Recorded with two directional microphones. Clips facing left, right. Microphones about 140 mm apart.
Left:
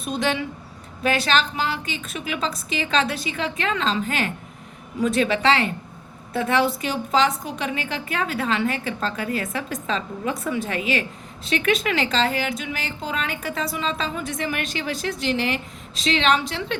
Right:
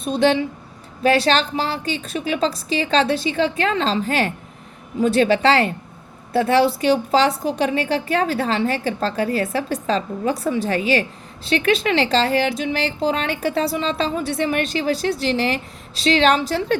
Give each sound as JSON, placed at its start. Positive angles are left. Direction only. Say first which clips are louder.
{"t": 0.0, "sound": "a woman's voice", "louder": "right 7 dB", "side_deg": -30}